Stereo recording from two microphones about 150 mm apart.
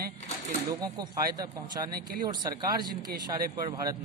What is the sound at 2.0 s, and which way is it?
Speech, 80° right.